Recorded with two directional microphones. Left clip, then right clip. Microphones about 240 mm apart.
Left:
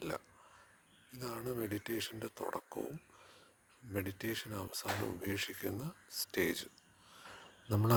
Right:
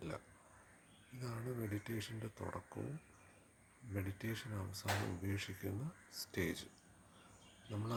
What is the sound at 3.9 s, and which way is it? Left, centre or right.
Speech, left.